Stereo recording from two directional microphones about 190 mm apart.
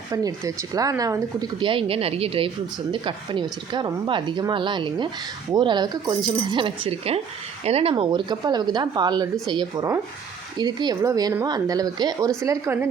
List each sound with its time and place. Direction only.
0.1 s speech: 20° right (ahead or behind)